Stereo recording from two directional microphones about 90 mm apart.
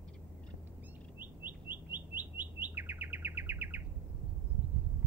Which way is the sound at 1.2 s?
20° right (ahead or behind).